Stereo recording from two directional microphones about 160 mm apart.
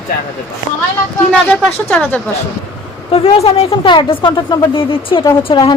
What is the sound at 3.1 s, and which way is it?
Speech, 40° left (ahead or behind).